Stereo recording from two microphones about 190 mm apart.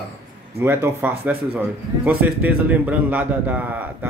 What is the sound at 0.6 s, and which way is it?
A man's voice, 10° right (ahead or behind).